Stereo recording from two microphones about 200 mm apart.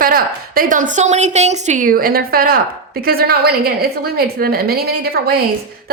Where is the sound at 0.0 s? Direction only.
45° right (ahead or behind).